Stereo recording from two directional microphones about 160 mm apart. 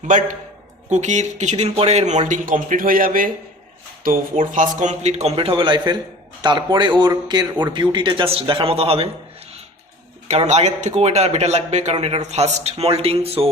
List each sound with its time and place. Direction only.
0.1 s speech: 55° right (ahead or behind); by 9.0 s 35° right (ahead or behind)
10.2 s speech: 45° right (ahead or behind)